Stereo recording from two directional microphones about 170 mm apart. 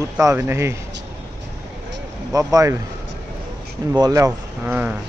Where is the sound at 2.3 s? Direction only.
20° right (ahead or behind).